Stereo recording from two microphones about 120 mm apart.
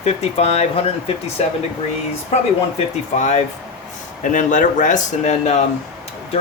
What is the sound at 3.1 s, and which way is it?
Speech, 80° left.